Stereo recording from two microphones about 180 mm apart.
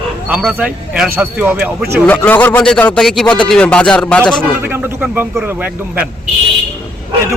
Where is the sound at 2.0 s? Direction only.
10° left (ahead or behind).